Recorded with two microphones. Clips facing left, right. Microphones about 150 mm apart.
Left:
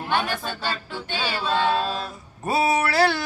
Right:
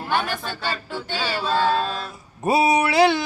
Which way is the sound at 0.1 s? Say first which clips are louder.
Right 1 dB; 10° right (ahead or behind).